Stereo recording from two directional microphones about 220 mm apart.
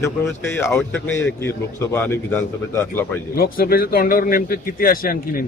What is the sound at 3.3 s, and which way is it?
Speech, 45° left (ahead or behind).